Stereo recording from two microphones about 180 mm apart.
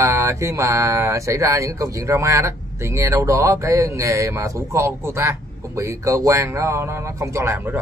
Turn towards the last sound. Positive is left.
turn(degrees=-10)  # may be behind; listen again after turning